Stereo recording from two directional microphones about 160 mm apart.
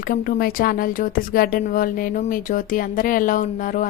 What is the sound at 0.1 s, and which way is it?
Speech, 65° left (ahead or behind).